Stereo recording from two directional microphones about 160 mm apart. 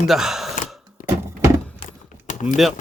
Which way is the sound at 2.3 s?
50° left (ahead or behind).